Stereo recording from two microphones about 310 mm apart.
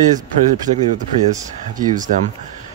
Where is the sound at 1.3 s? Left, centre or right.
Centre.